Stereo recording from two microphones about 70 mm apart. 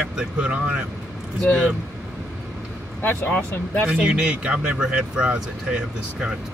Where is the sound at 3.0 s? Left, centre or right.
Left.